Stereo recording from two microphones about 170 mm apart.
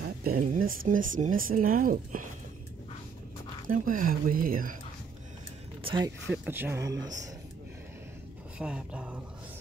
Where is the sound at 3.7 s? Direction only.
55° right (ahead or behind).